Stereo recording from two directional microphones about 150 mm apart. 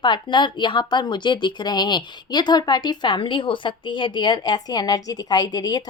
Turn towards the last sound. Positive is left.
turn(degrees=25)  # may be behind; listen again after turning